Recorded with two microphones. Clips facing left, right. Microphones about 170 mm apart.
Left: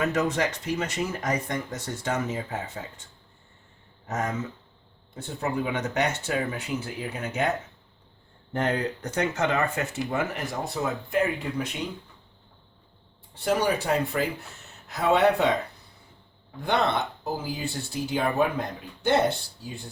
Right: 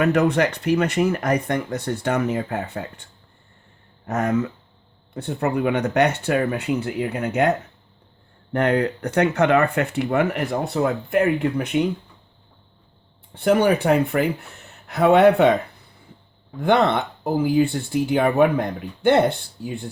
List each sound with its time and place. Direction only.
0.0 s speech: 60° right (ahead or behind)
8.5 s speech: 65° right (ahead or behind)
13.3 s speech: 60° right (ahead or behind)
16.6 s speech: 55° right (ahead or behind)